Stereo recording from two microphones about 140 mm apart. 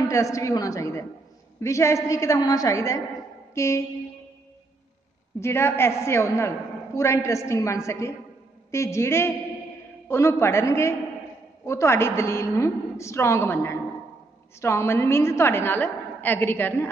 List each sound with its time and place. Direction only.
0.1 s a woman's voice: 20° left (ahead or behind)
5.4 s a woman's voice: 20° left (ahead or behind)